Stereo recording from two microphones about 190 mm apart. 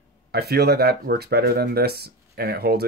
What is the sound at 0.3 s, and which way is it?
Speech, 55° right (ahead or behind).